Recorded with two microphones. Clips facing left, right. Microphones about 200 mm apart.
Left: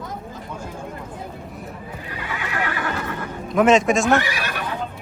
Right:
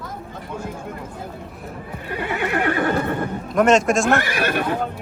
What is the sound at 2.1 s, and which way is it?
Neigh, 55° right (ahead or behind).